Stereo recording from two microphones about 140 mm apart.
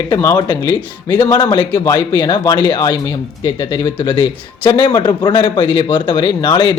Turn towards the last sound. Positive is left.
turn(degrees=35)  # may be behind; listen again after turning